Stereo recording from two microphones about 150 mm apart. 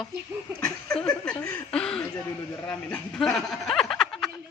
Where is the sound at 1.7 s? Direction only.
5° left (ahead or behind).